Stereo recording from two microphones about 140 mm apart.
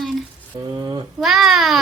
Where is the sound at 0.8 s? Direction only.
30° right (ahead or behind).